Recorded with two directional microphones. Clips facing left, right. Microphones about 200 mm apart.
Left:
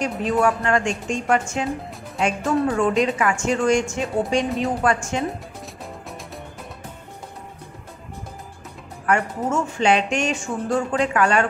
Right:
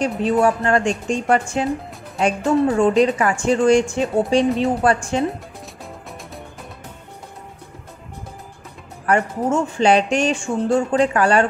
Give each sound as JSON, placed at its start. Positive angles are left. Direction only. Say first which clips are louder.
{"t": 0.0, "sound": "speech", "louder": "right 3 dB", "side_deg": -35}
{"t": 4.5, "sound": "speech", "louder": "right 5 dB", "side_deg": 0}
{"t": 4.8, "sound": "speech", "louder": "right 3 dB", "side_deg": -35}
{"t": 9.0, "sound": "speech", "louder": "right 3 dB", "side_deg": -35}